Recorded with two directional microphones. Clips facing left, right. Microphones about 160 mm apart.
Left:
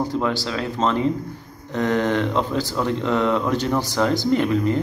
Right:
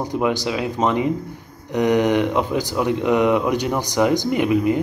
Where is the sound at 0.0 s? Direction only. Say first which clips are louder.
Right 2 dB; 15° right (ahead or behind).